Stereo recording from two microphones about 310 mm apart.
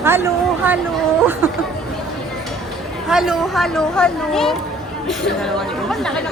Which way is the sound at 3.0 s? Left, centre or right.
Centre.